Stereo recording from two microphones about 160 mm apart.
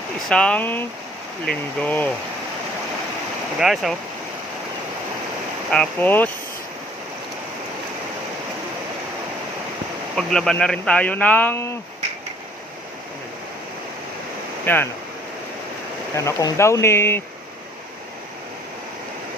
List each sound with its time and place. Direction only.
0.3 s speech: 5° left (ahead or behind)
3.6 s speech: centre (ahead or behind)
5.7 s speech: 5° left (ahead or behind)
10.2 s speech: 5° left (ahead or behind)
14.6 s speech: 10° left (ahead or behind)
16.1 s speech: 20° left (ahead or behind)